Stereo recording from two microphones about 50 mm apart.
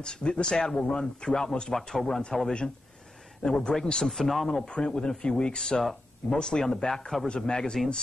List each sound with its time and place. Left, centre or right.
0.0 s speech: centre
1.8 s speech: centre
2.0 s speech: centre
3.4 s a man's voice: left
3.8 s speech: centre
4.1 s speech: centre
4.5 s speech: centre
7.2 s speech: centre